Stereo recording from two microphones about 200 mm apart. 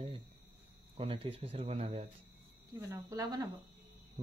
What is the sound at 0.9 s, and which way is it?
Speech, 30° right (ahead or behind).